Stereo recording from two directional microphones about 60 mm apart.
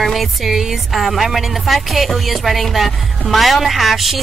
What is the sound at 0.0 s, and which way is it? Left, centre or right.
Speech, centre.